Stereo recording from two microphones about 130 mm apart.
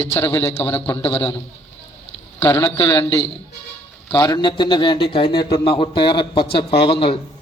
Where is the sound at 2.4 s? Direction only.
20° left (ahead or behind).